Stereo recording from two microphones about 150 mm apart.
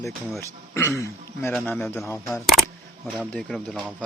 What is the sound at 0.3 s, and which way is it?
A man's voice, 20° left (ahead or behind).